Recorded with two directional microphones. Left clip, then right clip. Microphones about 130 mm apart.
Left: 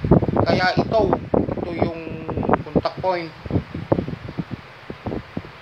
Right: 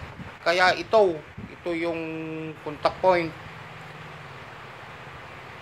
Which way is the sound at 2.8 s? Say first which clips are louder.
Right 2 dB; 40° right (ahead or behind).